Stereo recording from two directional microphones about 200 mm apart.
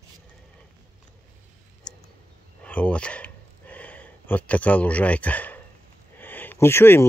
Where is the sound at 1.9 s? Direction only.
20° left (ahead or behind).